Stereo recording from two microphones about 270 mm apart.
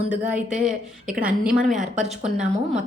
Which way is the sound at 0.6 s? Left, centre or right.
Centre.